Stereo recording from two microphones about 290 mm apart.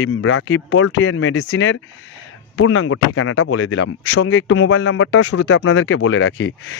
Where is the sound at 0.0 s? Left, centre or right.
Left.